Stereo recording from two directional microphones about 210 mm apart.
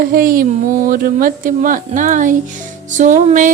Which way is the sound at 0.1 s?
40° right (ahead or behind).